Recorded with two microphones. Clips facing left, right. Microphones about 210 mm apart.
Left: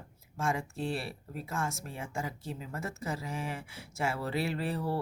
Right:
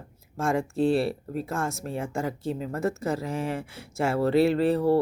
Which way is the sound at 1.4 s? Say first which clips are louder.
Right 4 dB; 45° right (ahead or behind).